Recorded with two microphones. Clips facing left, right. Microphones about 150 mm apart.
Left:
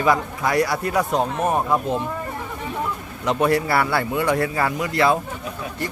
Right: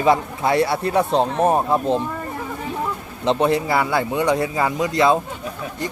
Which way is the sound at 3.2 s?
20° right (ahead or behind).